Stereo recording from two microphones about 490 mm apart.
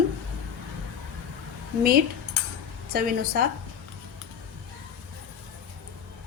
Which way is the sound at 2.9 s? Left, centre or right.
Centre.